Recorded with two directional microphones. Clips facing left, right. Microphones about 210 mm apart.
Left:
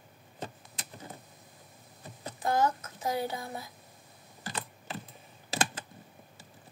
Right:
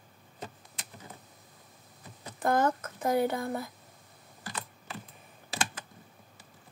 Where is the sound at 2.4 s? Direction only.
55° right (ahead or behind).